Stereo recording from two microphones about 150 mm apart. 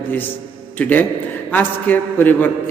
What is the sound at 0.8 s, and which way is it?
A man's voice, 10° left (ahead or behind).